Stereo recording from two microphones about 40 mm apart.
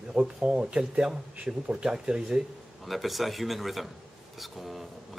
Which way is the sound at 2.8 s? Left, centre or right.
Centre.